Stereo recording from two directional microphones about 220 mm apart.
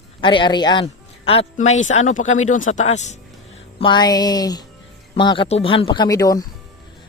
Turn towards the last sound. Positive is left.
turn(degrees=15)  # may be behind; listen again after turning